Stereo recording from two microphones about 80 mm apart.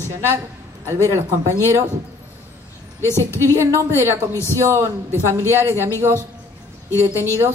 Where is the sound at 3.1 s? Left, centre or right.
Left.